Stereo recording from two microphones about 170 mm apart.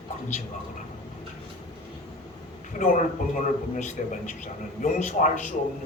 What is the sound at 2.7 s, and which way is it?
Speech, 50° left (ahead or behind).